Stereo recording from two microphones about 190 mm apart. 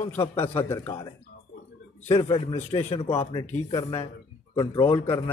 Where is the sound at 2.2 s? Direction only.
25° left (ahead or behind).